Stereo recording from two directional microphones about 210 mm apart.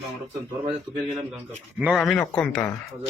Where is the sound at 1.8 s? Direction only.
Centre (ahead or behind).